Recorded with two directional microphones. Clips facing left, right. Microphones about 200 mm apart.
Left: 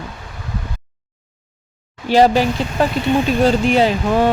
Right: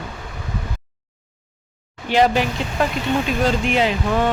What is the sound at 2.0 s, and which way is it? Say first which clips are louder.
Speech: left 4 dB; 35° left (ahead or behind).